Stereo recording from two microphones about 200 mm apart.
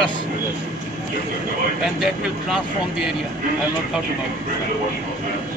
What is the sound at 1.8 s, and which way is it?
Speech, 5° right (ahead or behind).